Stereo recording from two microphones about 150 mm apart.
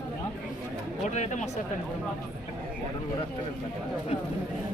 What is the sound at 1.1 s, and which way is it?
Speech, 50° left (ahead or behind).